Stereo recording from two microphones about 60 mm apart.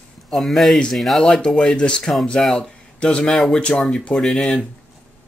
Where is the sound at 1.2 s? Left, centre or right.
Centre.